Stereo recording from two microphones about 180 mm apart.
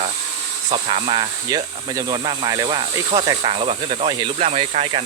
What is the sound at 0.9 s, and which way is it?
Speech, 30° right (ahead or behind).